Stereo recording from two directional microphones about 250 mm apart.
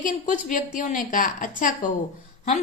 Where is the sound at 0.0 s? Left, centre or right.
Left.